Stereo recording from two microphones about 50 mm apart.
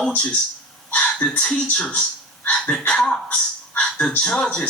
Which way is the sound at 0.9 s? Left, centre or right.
Left.